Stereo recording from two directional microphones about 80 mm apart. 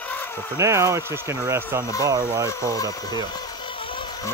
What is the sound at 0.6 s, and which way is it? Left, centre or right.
Speech, right.